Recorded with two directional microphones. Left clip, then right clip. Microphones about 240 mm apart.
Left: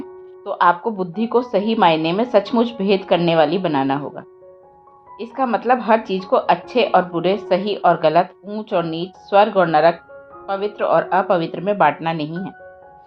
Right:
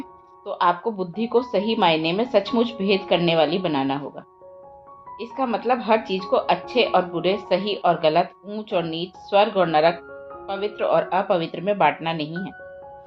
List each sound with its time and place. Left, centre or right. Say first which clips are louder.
0.4 s speech: left 5 dB; left